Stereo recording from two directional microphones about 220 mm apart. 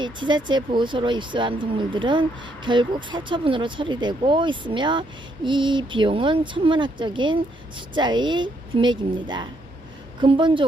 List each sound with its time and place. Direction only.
0.0 s speech: 20° right (ahead or behind)